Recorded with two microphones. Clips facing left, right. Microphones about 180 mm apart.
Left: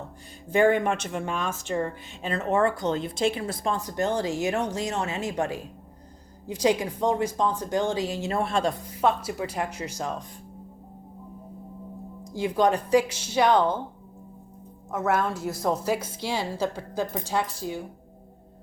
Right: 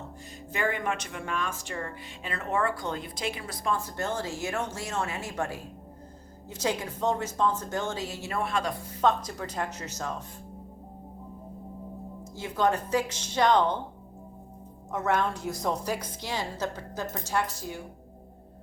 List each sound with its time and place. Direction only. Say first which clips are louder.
0.5 s a woman's voice: left 9 dB; 30° left (ahead or behind)
3.8 s a woman's voice: left 6 dB; 15° left (ahead or behind)
8.3 s a woman's voice: left 3 dB; 30° left (ahead or behind)
8.9 s a woman's voice: left 1 dB; 10° left (ahead or behind)
12.2 s a woman's voice: left 4 dB; 15° left (ahead or behind)
14.9 s a woman's voice: left 2 dB; 5° left (ahead or behind)